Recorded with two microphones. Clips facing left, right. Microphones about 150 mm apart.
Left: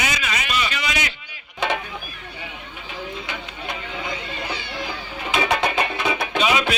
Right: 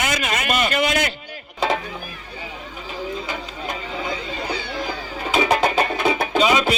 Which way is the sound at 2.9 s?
40° right (ahead or behind).